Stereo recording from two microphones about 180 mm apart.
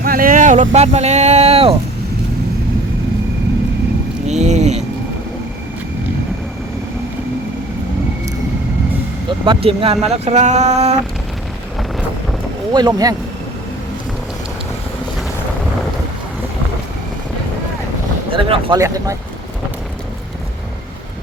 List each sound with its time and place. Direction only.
0.0 s speech: 50° right (ahead or behind); by 1.7 s 35° right (ahead or behind)
4.3 s a sound: 40° right (ahead or behind)
9.5 s speech: 30° right (ahead or behind)
12.7 s speech: 20° right (ahead or behind)
18.3 s boat: 30° right (ahead or behind)
18.8 s speech: 20° right (ahead or behind)